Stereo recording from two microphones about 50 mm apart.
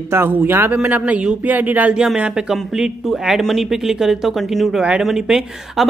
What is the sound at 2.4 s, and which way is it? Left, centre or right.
Speech, centre.